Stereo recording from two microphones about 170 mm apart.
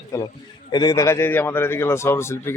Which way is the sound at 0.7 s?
20° left (ahead or behind).